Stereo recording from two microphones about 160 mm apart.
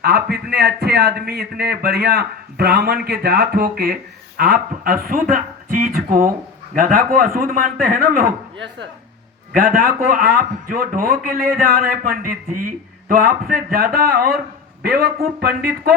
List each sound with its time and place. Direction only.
0.0 s a man's voice: 80° right
9.6 s a man's voice: 60° right (ahead or behind)
14.8 s speech: 80° right